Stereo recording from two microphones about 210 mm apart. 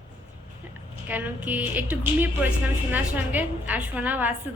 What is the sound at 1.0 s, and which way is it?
A woman's voice, 10° right (ahead or behind).